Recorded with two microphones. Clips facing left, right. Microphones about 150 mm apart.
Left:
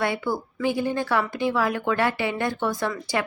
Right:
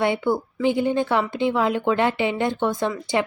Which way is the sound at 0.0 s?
20° right (ahead or behind).